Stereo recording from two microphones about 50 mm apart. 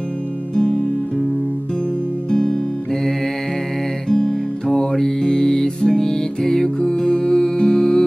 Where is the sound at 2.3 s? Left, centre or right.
Centre.